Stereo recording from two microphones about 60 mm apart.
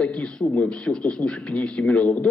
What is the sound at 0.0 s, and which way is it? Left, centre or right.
A man's voice, centre.